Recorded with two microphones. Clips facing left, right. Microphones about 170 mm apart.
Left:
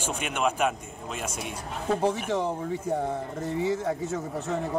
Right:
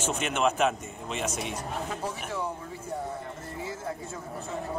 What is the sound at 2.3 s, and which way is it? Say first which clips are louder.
Speech: left 7 dB; 70° left (ahead or behind).